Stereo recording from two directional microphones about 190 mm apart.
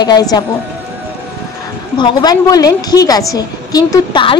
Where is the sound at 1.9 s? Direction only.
25° left (ahead or behind).